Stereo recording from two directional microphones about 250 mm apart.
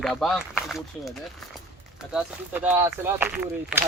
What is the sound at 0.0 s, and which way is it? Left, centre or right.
Speech, centre.